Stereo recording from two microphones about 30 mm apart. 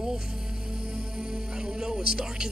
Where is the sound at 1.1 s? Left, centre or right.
Right.